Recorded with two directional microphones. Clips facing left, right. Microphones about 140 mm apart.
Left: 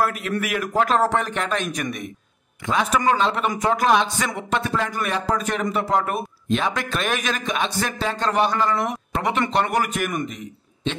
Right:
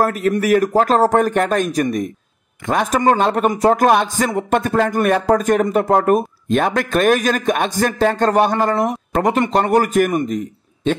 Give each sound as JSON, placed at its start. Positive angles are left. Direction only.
{"t": 0.0, "sound": "speech", "side_deg": -40}
{"t": 2.6, "sound": "a man's voice", "side_deg": -50}